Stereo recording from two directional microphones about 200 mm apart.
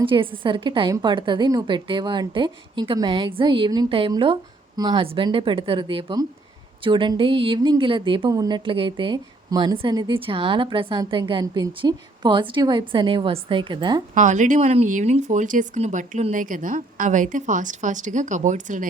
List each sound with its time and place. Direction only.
0.0 s speech: 25° right (ahead or behind)
14.2 s speech: 40° right (ahead or behind)